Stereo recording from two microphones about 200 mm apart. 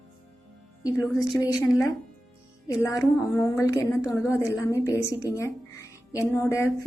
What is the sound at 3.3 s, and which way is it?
A woman's voice, 15° left (ahead or behind).